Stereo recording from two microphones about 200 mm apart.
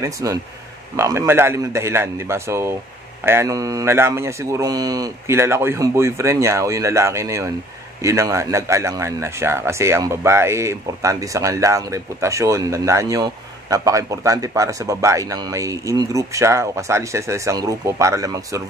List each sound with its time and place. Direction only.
0.0 s a man's voice: 15° right (ahead or behind)